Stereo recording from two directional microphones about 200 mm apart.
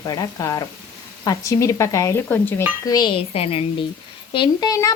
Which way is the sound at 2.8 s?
20° left (ahead or behind).